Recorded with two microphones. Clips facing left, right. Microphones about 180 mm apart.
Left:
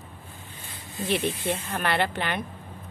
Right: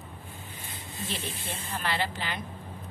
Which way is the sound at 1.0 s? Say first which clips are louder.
Left 11 dB; 60° left (ahead or behind).